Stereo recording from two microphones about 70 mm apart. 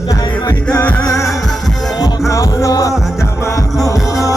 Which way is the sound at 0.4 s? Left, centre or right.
Left.